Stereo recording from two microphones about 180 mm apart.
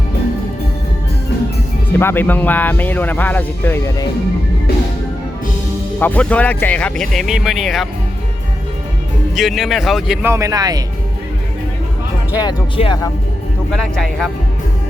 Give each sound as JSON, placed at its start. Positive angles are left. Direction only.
{"t": 1.9, "sound": "speech", "side_deg": 10}
{"t": 6.0, "sound": "speech", "side_deg": 10}
{"t": 9.3, "sound": "speech", "side_deg": 0}
{"t": 10.2, "sound": "speech", "side_deg": -15}
{"t": 12.4, "sound": "speech", "side_deg": 20}
{"t": 13.7, "sound": "speech", "side_deg": 0}